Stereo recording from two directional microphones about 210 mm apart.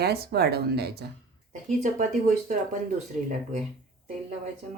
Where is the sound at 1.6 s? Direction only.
35° right (ahead or behind).